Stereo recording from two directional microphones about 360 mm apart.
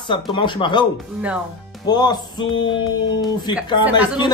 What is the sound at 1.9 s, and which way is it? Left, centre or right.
Speech, centre.